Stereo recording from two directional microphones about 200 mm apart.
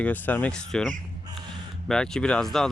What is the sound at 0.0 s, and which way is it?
Speech, 10° left (ahead or behind).